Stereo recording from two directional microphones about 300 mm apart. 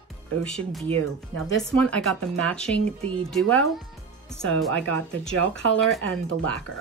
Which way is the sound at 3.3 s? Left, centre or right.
Centre.